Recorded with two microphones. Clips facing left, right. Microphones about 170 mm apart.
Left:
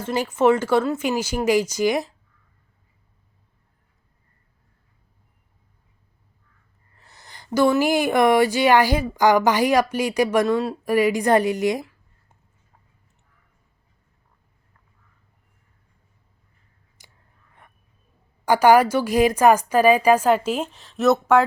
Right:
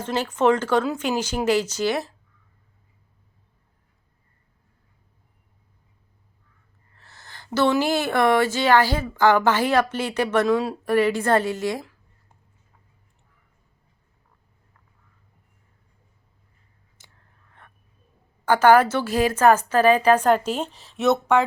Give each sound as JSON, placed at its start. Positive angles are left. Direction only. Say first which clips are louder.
{"t": 0.0, "sound": "speech", "louder": "left 2 dB", "side_deg": 10}
{"t": 6.9, "sound": "speech", "louder": "even", "side_deg": 15}
{"t": 18.4, "sound": "speech", "louder": "left 1 dB", "side_deg": 10}